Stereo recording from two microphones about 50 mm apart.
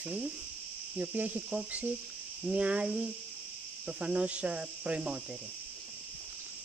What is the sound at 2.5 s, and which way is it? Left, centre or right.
Cricket, right.